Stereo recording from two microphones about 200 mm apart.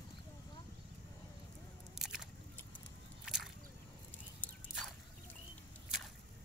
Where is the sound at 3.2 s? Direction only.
Centre (ahead or behind).